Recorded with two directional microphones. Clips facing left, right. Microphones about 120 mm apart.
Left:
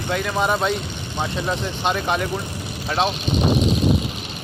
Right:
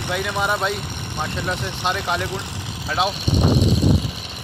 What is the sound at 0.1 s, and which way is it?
Speech, 5° right (ahead or behind).